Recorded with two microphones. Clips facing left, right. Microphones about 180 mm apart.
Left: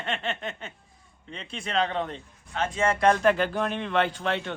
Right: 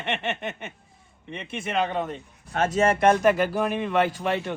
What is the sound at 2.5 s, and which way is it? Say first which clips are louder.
Speech: right 5 dB; 50° right (ahead or behind).